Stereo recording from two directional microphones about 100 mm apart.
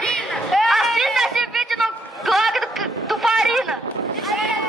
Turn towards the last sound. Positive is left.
turn(degrees=-5)  # may be behind; listen again after turning